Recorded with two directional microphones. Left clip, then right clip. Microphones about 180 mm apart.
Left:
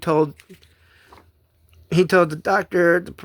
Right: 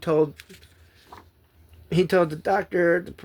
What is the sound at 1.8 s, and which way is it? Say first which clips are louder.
Speech: left 4 dB; 35° left (ahead or behind).